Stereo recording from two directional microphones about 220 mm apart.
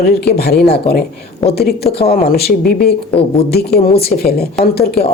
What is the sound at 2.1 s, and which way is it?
Speech, 45° left (ahead or behind).